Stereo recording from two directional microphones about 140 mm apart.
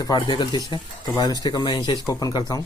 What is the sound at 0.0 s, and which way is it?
Speech, 30° left (ahead or behind).